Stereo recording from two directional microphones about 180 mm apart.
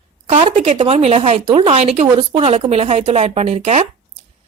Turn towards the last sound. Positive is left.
turn(degrees=-40)  # may be behind; listen again after turning